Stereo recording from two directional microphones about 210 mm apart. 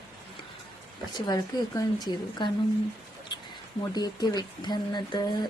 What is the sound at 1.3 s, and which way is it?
Speech, 20° left (ahead or behind).